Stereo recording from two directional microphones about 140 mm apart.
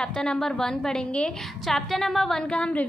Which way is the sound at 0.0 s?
5° left (ahead or behind).